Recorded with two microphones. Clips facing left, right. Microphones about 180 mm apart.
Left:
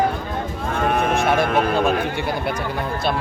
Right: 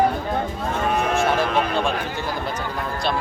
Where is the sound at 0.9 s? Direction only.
60° left (ahead or behind).